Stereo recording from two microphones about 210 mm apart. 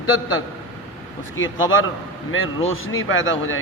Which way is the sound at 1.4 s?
70° left (ahead or behind).